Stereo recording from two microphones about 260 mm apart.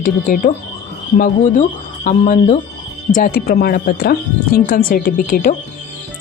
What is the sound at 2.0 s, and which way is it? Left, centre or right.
Speech, left.